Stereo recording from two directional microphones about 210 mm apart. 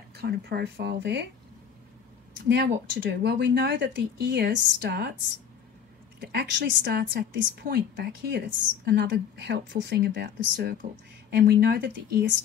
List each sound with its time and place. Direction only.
0.1 s a woman's voice: 50° right (ahead or behind)
2.4 s speech: 55° right (ahead or behind)
6.2 s a woman's voice: 50° right (ahead or behind)